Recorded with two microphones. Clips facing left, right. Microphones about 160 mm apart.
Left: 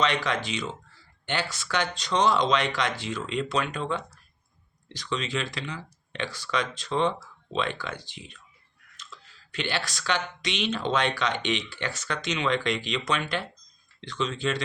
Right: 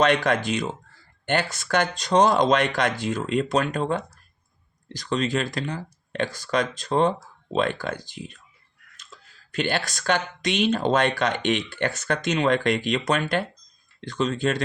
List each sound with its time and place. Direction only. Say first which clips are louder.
0.0 s speech: right 6 dB; 50° right (ahead or behind)